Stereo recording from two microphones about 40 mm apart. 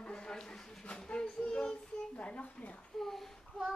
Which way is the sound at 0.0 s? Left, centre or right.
Left.